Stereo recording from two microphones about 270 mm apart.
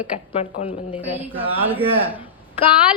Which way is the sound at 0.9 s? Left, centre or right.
Centre.